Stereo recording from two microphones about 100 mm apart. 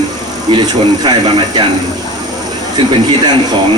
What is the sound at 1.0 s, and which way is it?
Speech, 50° right (ahead or behind).